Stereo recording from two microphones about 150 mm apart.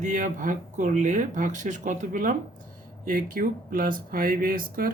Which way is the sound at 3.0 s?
65° right (ahead or behind).